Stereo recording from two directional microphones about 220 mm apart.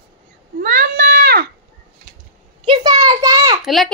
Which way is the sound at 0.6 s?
40° right (ahead or behind).